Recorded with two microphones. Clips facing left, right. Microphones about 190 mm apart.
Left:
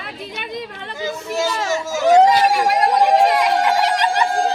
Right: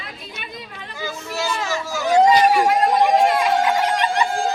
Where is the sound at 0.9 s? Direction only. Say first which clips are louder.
Left 5 dB; 20° left (ahead or behind).